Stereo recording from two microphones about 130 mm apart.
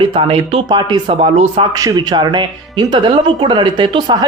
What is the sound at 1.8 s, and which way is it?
Speech, 30° right (ahead or behind).